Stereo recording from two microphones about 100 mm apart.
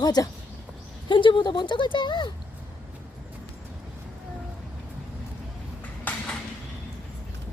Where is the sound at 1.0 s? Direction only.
55° left (ahead or behind).